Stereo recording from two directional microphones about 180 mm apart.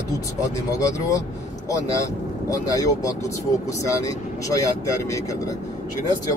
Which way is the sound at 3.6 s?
15° left (ahead or behind).